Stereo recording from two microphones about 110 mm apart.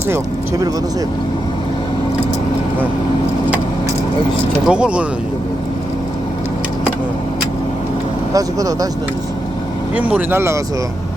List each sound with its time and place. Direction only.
4.6 s speech: 10° right (ahead or behind)
8.3 s speech: 30° right (ahead or behind)
9.9 s speech: 15° right (ahead or behind)